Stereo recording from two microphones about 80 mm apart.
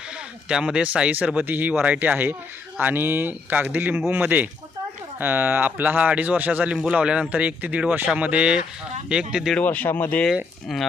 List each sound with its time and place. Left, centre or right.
0.4 s speech: centre
9.6 s speech: centre
10.7 s speech: centre